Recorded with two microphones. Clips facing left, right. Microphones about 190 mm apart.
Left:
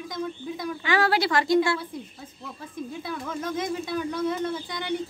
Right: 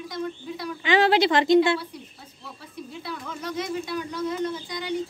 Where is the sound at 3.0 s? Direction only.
50° left (ahead or behind).